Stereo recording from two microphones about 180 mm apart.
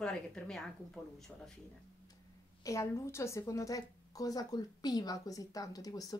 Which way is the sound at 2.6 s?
15° left (ahead or behind).